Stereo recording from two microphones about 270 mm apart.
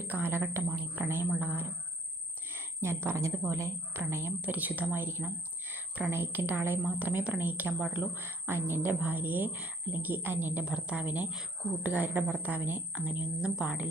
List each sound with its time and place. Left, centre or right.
0.0 s a woman's voice: centre